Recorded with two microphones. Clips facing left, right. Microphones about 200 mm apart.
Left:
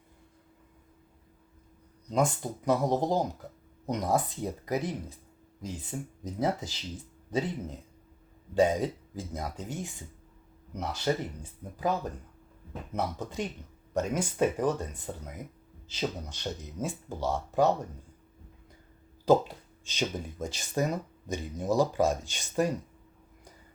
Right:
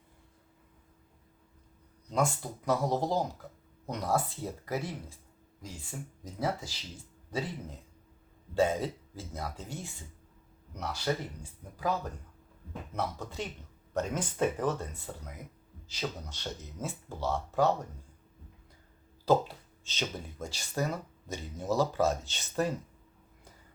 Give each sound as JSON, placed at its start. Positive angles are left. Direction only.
{"t": 2.0, "sound": "speech", "side_deg": 20}
{"t": 8.5, "sound": "speech", "side_deg": 15}
{"t": 12.9, "sound": "speech", "side_deg": 20}
{"t": 19.2, "sound": "speech", "side_deg": 15}